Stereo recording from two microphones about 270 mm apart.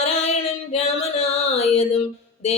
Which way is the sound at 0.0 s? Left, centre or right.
Left.